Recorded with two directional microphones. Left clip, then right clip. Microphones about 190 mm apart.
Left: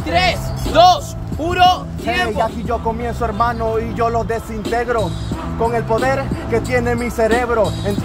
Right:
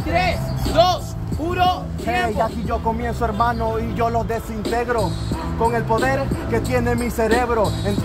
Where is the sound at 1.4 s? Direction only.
55° left (ahead or behind).